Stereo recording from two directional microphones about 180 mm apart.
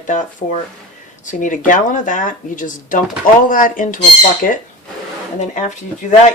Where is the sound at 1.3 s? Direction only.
45° left (ahead or behind).